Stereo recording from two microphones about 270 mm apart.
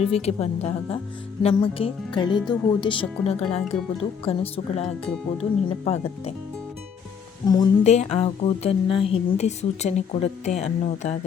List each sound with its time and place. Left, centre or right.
0.1 s speech: left
7.4 s speech: centre